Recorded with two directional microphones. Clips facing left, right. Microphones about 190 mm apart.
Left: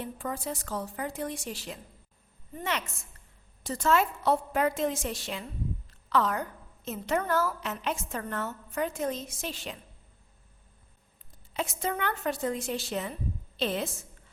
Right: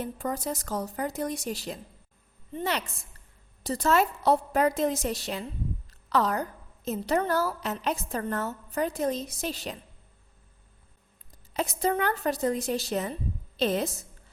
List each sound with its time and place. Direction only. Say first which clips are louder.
0.0 s a woman's voice: right 3 dB; 40° right (ahead or behind)
11.5 s a woman's voice: right 5 dB; 35° right (ahead or behind)